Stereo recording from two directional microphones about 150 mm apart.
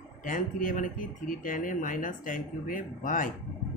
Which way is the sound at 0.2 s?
65° left (ahead or behind).